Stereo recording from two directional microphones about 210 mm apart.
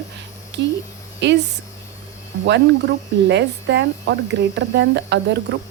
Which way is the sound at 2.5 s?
55° right (ahead or behind).